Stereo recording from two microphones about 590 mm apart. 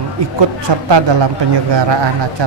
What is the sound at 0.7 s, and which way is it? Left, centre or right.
A man's voice, right.